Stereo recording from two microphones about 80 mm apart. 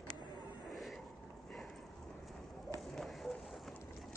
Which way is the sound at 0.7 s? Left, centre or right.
Centre.